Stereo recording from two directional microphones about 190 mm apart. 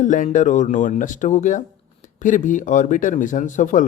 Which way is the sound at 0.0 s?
40° left (ahead or behind).